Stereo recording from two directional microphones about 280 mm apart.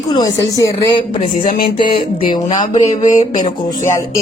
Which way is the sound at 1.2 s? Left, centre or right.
Left.